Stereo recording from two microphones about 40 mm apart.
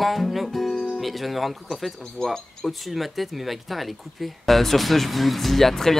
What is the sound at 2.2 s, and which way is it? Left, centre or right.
Speech, centre.